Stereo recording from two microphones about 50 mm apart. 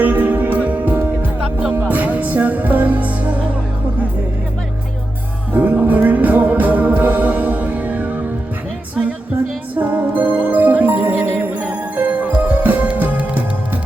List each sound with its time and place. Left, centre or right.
0.0 s music: right
5.5 s music: right
9.7 s music: right